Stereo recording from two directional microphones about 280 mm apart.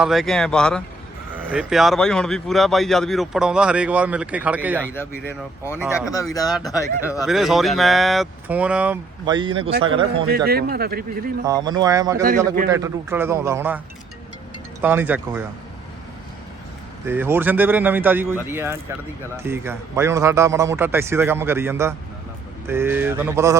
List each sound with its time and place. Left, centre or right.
0.0 s speech: centre
6.5 s speech: centre
6.7 s speech: centre
7.3 s speech: centre
9.2 s a man's voice: centre
10.2 s speech: right
11.4 s a man's voice: centre
17.1 s a man's voice: centre